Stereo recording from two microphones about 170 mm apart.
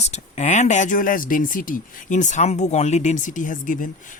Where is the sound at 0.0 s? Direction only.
40° left (ahead or behind).